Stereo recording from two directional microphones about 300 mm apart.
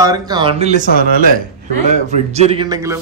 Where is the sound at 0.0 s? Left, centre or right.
Centre.